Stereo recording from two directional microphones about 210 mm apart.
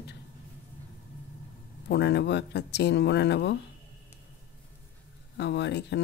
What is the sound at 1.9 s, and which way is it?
Speech, 55° left (ahead or behind).